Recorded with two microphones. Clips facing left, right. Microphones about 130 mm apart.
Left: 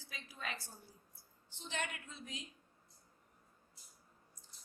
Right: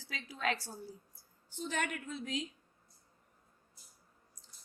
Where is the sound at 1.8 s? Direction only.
90° right.